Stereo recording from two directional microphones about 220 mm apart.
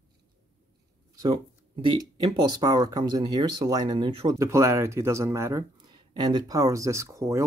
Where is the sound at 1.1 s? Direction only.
20° right (ahead or behind).